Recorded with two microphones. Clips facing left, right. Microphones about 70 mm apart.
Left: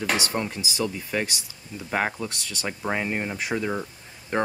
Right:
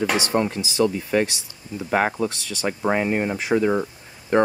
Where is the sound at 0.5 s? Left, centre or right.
Centre.